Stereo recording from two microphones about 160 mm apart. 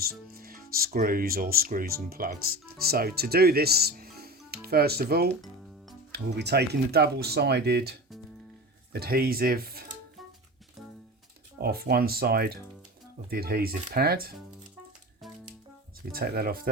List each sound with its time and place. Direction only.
0.0 s speech: 70° right (ahead or behind)
4.2 s music: 80° right
6.1 s speech: 90° right
8.9 s speech: 75° right (ahead or behind)
11.6 s speech: 75° right (ahead or behind)
16.1 s speech: 75° right (ahead or behind)